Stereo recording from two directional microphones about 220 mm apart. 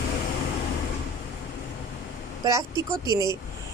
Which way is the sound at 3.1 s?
20° left (ahead or behind).